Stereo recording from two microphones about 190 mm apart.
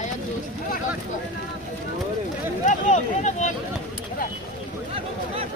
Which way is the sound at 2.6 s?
40° left (ahead or behind).